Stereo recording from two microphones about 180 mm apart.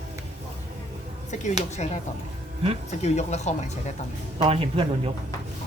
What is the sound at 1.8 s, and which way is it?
Speech, 40° left (ahead or behind).